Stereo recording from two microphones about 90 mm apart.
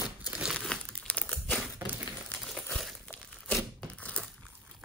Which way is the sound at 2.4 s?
Centre (ahead or behind).